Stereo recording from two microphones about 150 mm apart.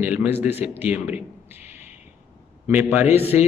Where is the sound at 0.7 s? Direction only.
10° right (ahead or behind).